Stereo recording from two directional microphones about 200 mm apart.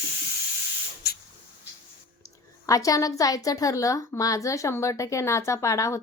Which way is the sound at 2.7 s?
15° left (ahead or behind).